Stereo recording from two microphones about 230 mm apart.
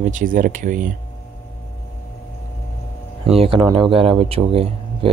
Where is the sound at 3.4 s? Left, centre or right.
Right.